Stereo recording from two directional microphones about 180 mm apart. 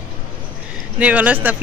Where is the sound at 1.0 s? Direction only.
5° right (ahead or behind).